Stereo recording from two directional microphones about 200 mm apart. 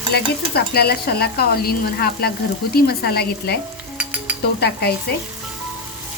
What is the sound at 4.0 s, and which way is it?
Stir, 10° right (ahead or behind).